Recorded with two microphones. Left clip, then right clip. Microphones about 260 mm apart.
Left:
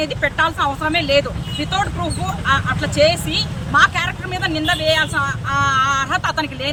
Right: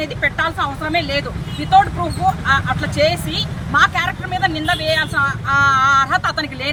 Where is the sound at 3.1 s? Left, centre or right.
Centre.